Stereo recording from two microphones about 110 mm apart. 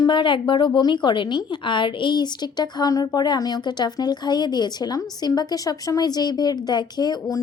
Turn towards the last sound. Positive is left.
turn(degrees=35)  # may be behind; listen again after turning